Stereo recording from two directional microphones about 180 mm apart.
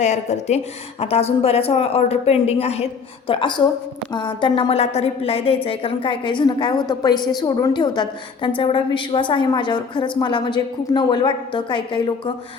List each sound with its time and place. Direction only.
0.0 s a woman's voice: 40° left (ahead or behind)